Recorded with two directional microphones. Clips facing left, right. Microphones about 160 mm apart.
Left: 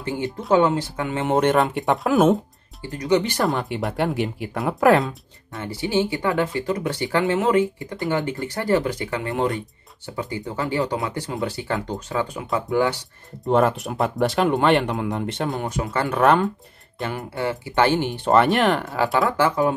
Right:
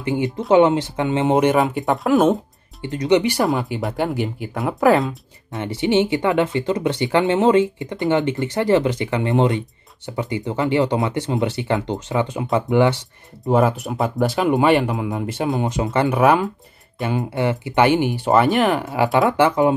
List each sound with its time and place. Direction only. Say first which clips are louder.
0.0 s speech: right 5 dB; 20° right (ahead or behind)
1.5 s speech: right 1 dB; centre (ahead or behind)
2.8 s speech: right 4 dB; 20° right (ahead or behind)
3.4 s speech: right 2 dB; centre (ahead or behind)
5.5 s speech: right 5 dB; 20° right (ahead or behind)
13.5 s speech: right 1 dB; centre (ahead or behind)
15.6 s speech: right 5 dB; 20° right (ahead or behind)
16.2 s speech: right 1 dB; 10° right (ahead or behind)
17.0 s speech: right 5 dB; 20° right (ahead or behind); by 18.9 s centre (ahead or behind)
19.1 s speech: right 4 dB; 20° right (ahead or behind)